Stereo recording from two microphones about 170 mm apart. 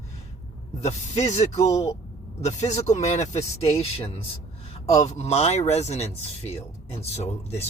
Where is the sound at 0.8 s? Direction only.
40° left (ahead or behind).